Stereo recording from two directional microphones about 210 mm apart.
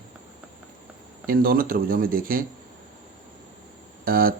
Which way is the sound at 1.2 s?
45° right (ahead or behind).